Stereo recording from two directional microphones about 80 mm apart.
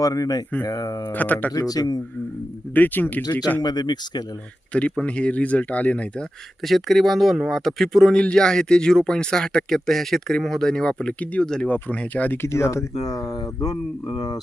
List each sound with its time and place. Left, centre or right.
0.0 s speech: left
1.1 s speech: left
1.5 s speech: left
2.7 s speech: left
3.6 s speech: left
4.7 s speech: centre
6.7 s speech: centre; by 13.7 s left